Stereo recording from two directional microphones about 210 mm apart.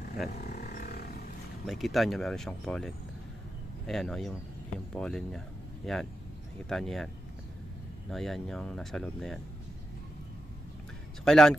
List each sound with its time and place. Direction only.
0.3 s wild animals: 45° left (ahead or behind)
1.7 s speech: centre (ahead or behind)
8.1 s speech: centre (ahead or behind)
11.2 s speech: centre (ahead or behind)